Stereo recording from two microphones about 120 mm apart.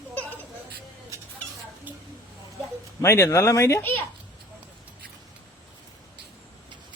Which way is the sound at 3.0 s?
25° left (ahead or behind).